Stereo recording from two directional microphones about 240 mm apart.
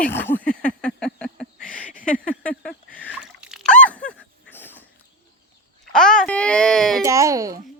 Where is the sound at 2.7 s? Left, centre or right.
Centre.